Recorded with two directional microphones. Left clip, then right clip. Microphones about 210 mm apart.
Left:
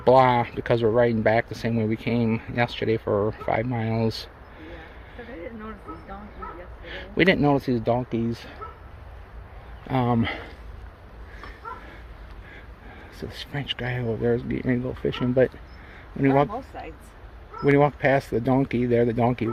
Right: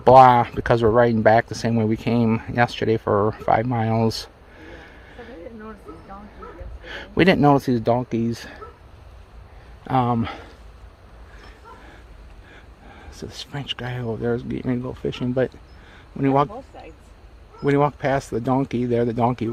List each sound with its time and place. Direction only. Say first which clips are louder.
0.0 s speech: right 6 dB; 35° right (ahead or behind)
6.8 s speech: right 3 dB; 35° right (ahead or behind)
9.8 s speech: right 4 dB; 25° right (ahead or behind)
10.2 s speech: left 1 dB; 10° right (ahead or behind)
13.1 s speech: even; 15° right (ahead or behind)
16.7 s speech: left 4 dB; 55° left (ahead or behind)
17.6 s speech: even; 15° right (ahead or behind)